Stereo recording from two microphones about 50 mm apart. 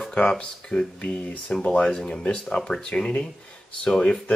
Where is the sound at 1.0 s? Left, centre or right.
Left.